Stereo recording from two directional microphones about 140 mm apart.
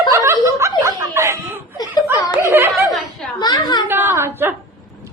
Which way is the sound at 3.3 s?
30° left (ahead or behind).